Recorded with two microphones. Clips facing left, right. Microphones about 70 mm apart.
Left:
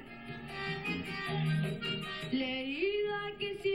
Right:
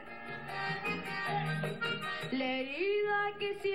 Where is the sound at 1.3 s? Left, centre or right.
Right.